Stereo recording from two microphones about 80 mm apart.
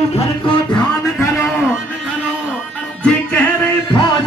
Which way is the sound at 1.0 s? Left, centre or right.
Left.